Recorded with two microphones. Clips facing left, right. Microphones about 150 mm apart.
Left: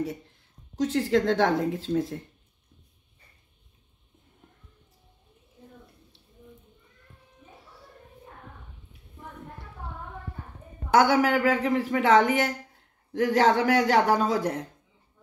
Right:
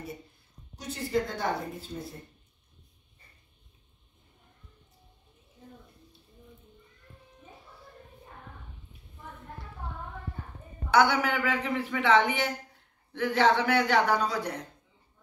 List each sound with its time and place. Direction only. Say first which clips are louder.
0.7 s speech: left 7 dB; 90° left
10.9 s a man's voice: left 3 dB; 45° left (ahead or behind)